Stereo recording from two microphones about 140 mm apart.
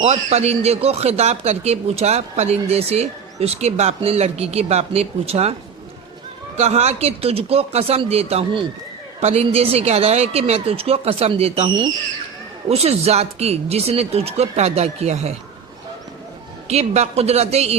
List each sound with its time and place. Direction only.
0.0 s speech: 50° right (ahead or behind)
6.6 s speech: 50° right (ahead or behind)
16.6 s speech: 50° right (ahead or behind)